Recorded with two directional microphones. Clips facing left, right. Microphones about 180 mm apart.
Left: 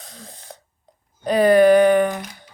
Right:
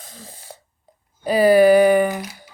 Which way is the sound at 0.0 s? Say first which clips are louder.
Even; centre (ahead or behind).